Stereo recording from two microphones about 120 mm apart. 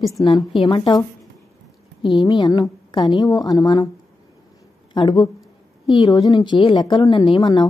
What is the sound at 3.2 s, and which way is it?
Speech, 30° left (ahead or behind).